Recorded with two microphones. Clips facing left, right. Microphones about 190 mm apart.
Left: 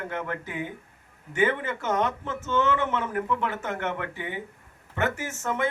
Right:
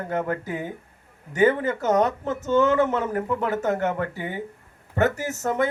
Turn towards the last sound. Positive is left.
turn(degrees=-40)  # may be behind; listen again after turning